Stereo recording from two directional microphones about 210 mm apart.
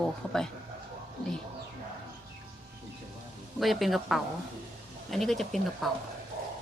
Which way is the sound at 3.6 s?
Centre (ahead or behind).